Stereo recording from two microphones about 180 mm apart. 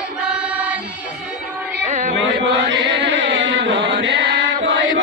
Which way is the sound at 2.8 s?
80° right.